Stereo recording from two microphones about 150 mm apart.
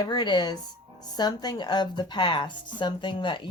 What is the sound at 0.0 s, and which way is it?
Speech, 30° left (ahead or behind).